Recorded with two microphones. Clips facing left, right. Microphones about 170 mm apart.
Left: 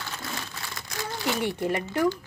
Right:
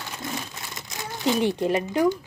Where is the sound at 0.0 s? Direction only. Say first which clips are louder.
Right 3 dB; 20° right (ahead or behind).